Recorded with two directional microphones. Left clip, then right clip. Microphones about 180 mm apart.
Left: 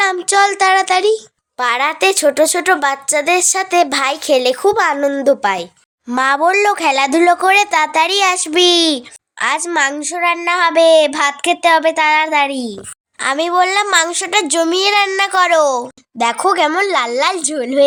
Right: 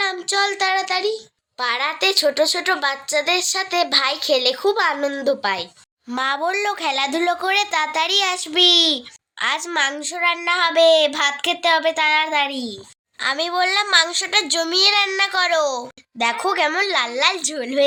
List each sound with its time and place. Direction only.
0.0 s a child's voice: 45° left (ahead or behind); by 17.8 s 25° left (ahead or behind)